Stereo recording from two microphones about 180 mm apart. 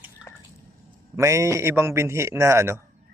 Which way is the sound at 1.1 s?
15° right (ahead or behind).